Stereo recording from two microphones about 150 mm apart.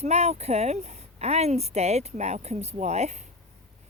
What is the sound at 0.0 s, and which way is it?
Speech, 45° right (ahead or behind).